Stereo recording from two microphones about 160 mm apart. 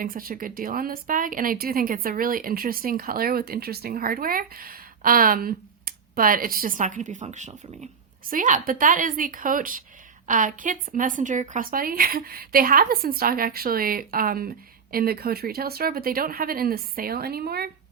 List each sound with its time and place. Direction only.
0.0 s speech: 65° right (ahead or behind)